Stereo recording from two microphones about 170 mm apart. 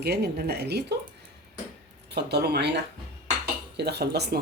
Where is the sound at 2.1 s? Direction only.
75° right (ahead or behind).